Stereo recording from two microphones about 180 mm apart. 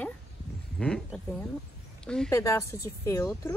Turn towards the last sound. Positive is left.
turn(degrees=15)  # may be behind; listen again after turning